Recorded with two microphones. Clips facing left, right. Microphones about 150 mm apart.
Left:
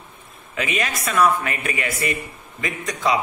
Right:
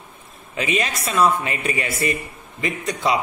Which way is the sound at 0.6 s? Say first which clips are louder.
Right 2 dB; 30° right (ahead or behind).